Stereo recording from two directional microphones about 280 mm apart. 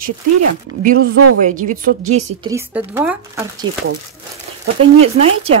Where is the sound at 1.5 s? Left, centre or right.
Right.